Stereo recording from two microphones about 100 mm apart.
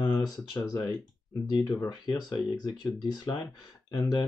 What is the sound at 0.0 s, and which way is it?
Speech, 45° left (ahead or behind).